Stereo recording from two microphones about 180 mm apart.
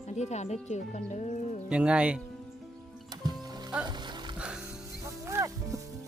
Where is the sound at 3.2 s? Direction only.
20° right (ahead or behind).